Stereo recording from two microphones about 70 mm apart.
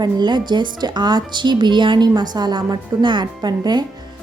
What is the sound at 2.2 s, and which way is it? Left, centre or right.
A woman's voice, right.